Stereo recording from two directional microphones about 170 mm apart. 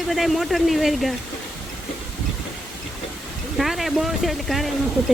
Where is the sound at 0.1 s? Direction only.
Centre (ahead or behind).